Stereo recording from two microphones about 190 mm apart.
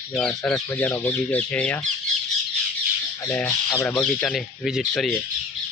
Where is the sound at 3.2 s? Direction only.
10° left (ahead or behind).